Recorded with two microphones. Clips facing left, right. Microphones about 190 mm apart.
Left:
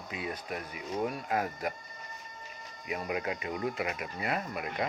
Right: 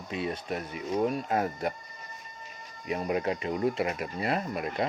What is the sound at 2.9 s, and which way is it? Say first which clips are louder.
Speech: right 5 dB; 35° right (ahead or behind).